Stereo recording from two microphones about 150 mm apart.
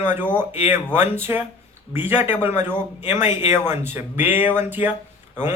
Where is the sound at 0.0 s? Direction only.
15° right (ahead or behind).